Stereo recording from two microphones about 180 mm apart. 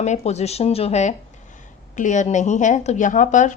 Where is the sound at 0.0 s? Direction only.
40° left (ahead or behind).